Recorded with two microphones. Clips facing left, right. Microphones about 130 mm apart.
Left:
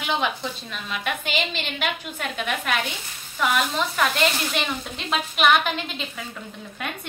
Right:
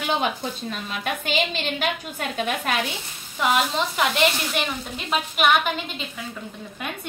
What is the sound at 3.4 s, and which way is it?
A woman's voice, 20° right (ahead or behind).